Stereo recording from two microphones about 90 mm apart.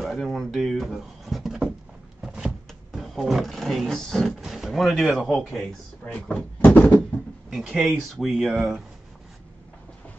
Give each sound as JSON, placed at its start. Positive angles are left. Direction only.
{"t": 0.0, "sound": "speech", "side_deg": 0}
{"t": 2.2, "sound": "vehicle", "side_deg": -5}
{"t": 4.4, "sound": "speech", "side_deg": -5}
{"t": 6.0, "sound": "speech", "side_deg": 15}
{"t": 7.0, "sound": "speech", "side_deg": 0}